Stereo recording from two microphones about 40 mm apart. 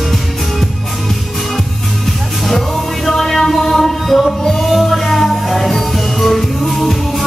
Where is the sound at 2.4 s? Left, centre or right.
Centre.